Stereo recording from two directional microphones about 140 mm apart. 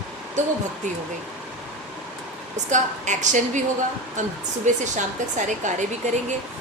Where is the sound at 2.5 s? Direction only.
60° right (ahead or behind).